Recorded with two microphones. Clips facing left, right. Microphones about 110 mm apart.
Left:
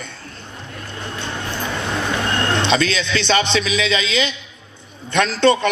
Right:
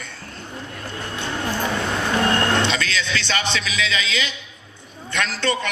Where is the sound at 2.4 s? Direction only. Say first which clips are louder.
Left 3 dB; 20° left (ahead or behind).